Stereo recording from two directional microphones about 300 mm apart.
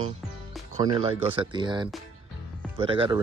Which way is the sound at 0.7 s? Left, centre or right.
Centre.